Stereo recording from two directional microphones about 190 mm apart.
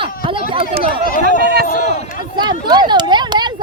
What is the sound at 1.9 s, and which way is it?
Speech, 35° left (ahead or behind).